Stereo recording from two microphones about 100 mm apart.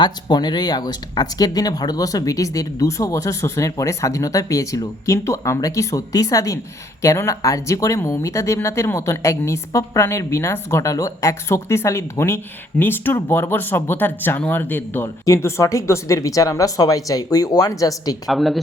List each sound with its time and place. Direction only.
0.0 s speech: 50° left (ahead or behind)
18.3 s speech: centre (ahead or behind)